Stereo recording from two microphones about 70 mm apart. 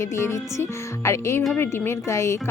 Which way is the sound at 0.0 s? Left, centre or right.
Left.